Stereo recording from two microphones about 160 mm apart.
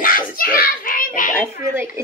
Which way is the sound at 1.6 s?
15° right (ahead or behind).